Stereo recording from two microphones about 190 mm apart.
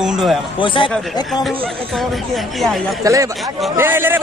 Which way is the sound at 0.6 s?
25° left (ahead or behind).